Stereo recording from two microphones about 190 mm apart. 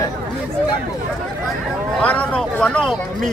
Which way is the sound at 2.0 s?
5° left (ahead or behind).